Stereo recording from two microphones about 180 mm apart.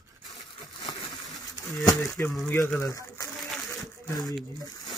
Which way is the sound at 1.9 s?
15° left (ahead or behind).